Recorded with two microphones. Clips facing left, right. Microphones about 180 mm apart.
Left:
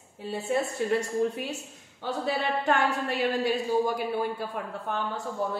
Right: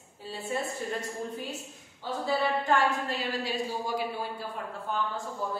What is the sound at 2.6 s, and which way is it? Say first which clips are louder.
A woman's voice: left 1 dB; 65° left (ahead or behind).